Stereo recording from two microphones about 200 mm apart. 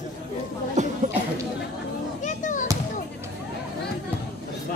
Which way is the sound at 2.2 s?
40° left (ahead or behind).